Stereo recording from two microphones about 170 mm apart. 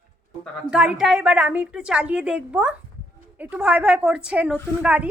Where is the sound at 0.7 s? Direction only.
5° right (ahead or behind).